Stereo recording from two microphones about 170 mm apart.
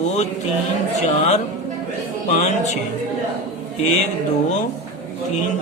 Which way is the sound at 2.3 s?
45° left (ahead or behind).